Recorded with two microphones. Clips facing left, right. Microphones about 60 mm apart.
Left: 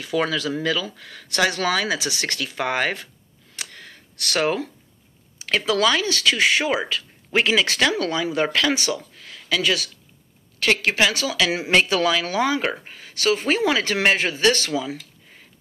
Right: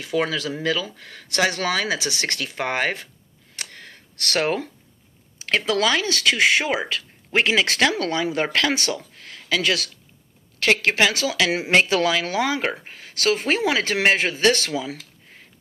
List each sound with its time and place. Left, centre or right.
0.0 s speech: right
3.5 s a sound: right
5.4 s speech: right
11.2 s speech: right